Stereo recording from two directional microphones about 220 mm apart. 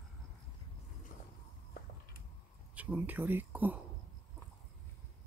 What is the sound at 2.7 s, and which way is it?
Speech, 5° right (ahead or behind).